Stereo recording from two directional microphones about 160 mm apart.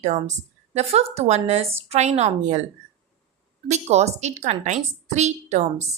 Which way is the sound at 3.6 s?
45° right (ahead or behind).